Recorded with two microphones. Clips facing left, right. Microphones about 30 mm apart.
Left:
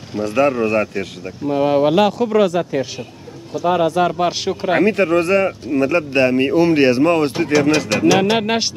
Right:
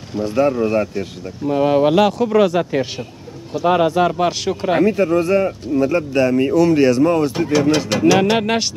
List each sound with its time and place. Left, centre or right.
0.2 s speech: left
1.4 s speech: centre
2.5 s speech: right
3.9 s speech: centre
4.8 s speech: left
5.7 s speech: left
7.1 s speech: left
7.7 s speech: centre